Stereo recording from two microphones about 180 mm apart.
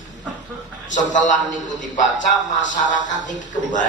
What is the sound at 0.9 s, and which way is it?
Speech, 90° left.